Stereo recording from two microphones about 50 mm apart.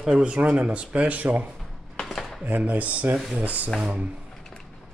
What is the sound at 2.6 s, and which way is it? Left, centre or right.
Speech, right.